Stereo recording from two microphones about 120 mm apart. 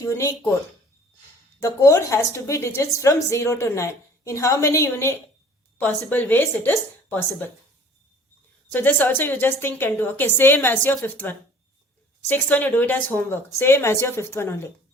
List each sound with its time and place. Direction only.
0.0 s a woman's voice: 25° left (ahead or behind)
1.5 s a woman's voice: 25° left (ahead or behind)
8.7 s a woman's voice: 15° left (ahead or behind)